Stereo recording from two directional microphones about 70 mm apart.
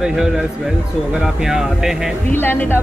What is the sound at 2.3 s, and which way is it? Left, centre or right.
Speech, left.